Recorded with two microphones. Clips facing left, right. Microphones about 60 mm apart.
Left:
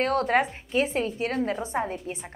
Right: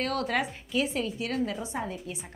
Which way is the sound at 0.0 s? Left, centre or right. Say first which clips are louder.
Left 6 dB; left.